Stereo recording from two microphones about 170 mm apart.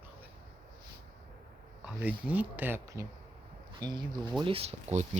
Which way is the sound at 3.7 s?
25° right (ahead or behind).